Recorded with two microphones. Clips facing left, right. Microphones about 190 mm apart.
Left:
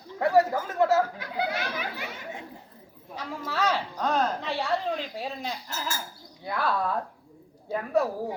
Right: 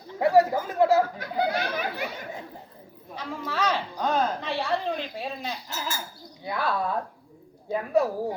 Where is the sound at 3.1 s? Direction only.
5° left (ahead or behind).